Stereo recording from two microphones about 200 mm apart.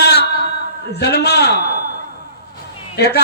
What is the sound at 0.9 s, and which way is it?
Speech, 55° left (ahead or behind).